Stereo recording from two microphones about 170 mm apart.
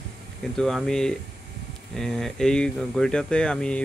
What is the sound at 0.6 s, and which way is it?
Speech, centre (ahead or behind).